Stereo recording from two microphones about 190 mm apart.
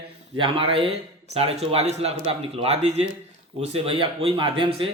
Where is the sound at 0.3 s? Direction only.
25° right (ahead or behind).